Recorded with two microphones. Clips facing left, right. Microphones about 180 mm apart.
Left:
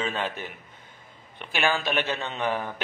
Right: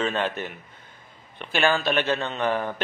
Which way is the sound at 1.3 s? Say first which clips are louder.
Right 3 dB; 15° left (ahead or behind).